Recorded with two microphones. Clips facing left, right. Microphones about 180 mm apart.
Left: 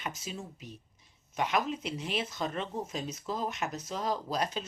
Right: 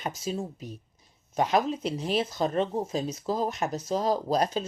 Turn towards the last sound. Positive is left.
turn(degrees=-35)  # may be behind; listen again after turning